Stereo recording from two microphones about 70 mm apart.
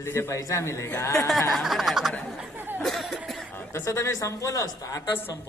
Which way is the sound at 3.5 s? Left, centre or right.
Left.